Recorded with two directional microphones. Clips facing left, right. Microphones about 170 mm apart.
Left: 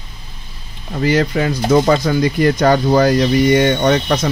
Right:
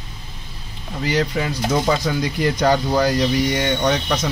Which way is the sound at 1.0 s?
55° left (ahead or behind).